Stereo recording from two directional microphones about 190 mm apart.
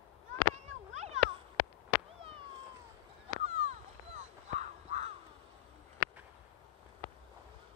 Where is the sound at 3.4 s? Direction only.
35° right (ahead or behind).